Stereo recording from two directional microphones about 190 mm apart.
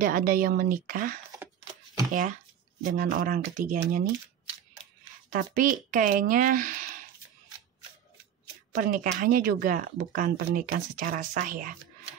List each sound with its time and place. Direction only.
0.0 s speech: 45° right (ahead or behind)
2.8 s speech: 45° right (ahead or behind)
5.3 s speech: 50° right (ahead or behind)
8.7 s speech: 45° right (ahead or behind)